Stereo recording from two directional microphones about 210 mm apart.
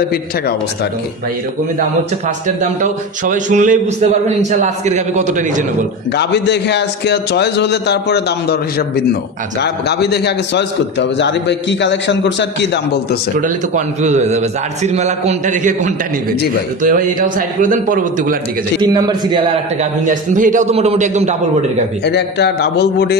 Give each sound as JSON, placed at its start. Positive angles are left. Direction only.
{"t": 2.4, "sound": "speech", "side_deg": -35}
{"t": 6.1, "sound": "a man's voice", "side_deg": 55}
{"t": 13.4, "sound": "speech", "side_deg": -35}
{"t": 18.8, "sound": "a man's voice", "side_deg": -20}
{"t": 20.1, "sound": "speech", "side_deg": -35}
{"t": 22.0, "sound": "a man's voice", "side_deg": 55}